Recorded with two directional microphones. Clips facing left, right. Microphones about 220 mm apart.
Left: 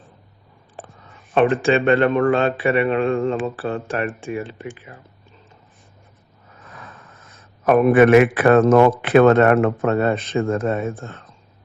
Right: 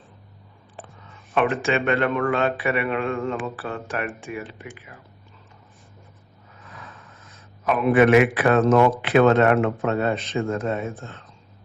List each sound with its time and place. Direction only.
1.3 s a man's voice: 30° left (ahead or behind)
6.7 s vehicle: 50° left (ahead or behind)
7.6 s a man's voice: 50° left (ahead or behind)